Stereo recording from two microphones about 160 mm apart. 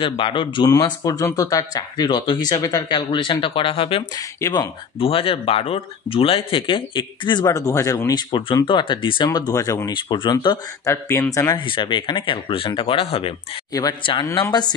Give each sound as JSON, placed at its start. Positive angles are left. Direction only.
{"t": 0.0, "sound": "speech", "side_deg": 30}
{"t": 4.4, "sound": "speech", "side_deg": 20}
{"t": 5.0, "sound": "speech", "side_deg": 35}
{"t": 10.9, "sound": "speech", "side_deg": 15}
{"t": 11.6, "sound": "speech", "side_deg": 30}